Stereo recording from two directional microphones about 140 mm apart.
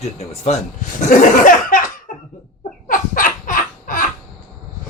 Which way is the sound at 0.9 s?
70° left (ahead or behind).